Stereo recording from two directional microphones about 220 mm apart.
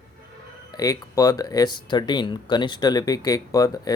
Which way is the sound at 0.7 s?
15° left (ahead or behind).